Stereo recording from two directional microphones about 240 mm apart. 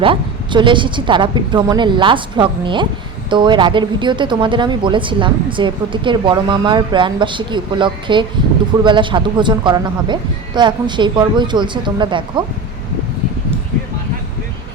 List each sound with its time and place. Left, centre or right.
0.0 s speech: right